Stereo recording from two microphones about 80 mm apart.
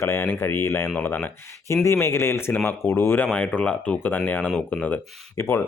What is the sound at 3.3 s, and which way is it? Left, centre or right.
Speech, centre.